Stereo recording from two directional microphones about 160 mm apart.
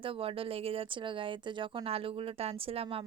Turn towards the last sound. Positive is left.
turn(degrees=-35)  # may be behind; listen again after turning